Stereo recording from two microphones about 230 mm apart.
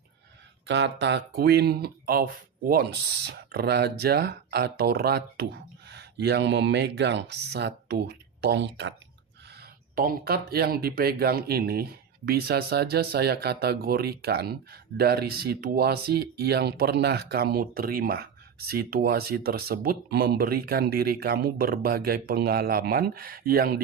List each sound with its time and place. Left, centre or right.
0.7 s speech: right
9.5 s speech: right